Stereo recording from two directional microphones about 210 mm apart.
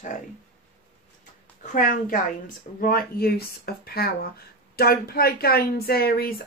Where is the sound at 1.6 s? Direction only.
40° left (ahead or behind).